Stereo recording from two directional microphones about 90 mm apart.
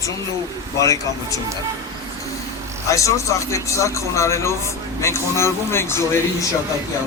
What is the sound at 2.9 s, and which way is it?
A man's voice, 35° left (ahead or behind).